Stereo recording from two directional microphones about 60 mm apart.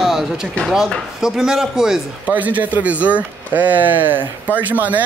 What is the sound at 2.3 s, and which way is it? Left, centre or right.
Speech, right.